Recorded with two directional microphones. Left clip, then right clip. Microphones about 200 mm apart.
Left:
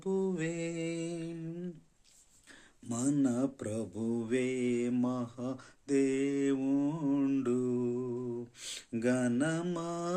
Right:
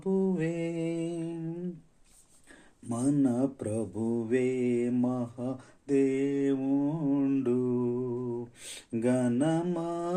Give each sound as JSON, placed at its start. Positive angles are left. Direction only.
{"t": 0.0, "sound": "mantra", "side_deg": 15}
{"t": 2.9, "sound": "mantra", "side_deg": 15}
{"t": 8.6, "sound": "a sound", "side_deg": 10}